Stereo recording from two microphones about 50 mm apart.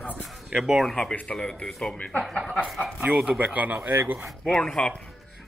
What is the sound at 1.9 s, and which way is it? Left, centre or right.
Speech, left.